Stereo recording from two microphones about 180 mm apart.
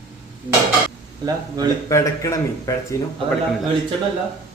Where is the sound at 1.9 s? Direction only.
15° left (ahead or behind).